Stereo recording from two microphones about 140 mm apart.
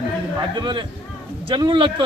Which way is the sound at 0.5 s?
35° right (ahead or behind).